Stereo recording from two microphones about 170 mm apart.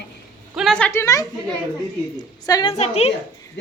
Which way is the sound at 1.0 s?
20° left (ahead or behind).